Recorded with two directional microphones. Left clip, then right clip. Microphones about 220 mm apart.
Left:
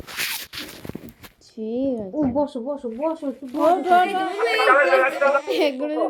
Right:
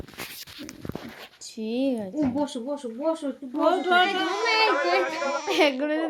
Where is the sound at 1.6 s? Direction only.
45° right (ahead or behind).